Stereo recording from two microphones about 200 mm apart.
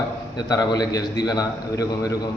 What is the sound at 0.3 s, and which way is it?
A man's voice, 20° left (ahead or behind).